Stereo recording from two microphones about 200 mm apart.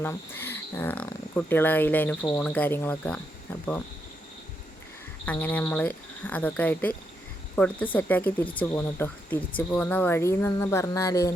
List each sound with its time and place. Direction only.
0.0 s speech: 10° left (ahead or behind)
5.2 s speech: 5° left (ahead or behind)